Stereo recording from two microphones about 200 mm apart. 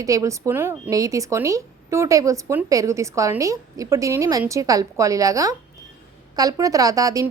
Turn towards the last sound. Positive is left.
turn(degrees=-15)  # may be behind; listen again after turning